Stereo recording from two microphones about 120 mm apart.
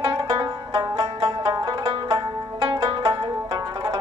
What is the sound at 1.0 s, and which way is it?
Music, 45° right (ahead or behind).